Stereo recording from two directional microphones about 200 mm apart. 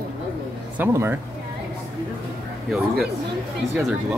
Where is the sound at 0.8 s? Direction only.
10° right (ahead or behind).